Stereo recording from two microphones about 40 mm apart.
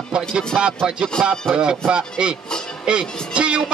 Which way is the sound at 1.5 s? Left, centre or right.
Right.